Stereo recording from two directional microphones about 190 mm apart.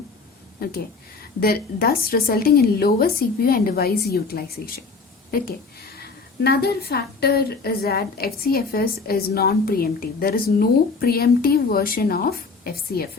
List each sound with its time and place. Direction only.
1.4 s a woman's voice: 50° left (ahead or behind)
6.0 s a woman's voice: 55° left (ahead or behind)